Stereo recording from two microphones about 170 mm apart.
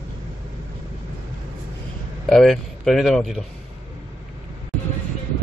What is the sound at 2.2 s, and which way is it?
A man's voice, centre (ahead or behind).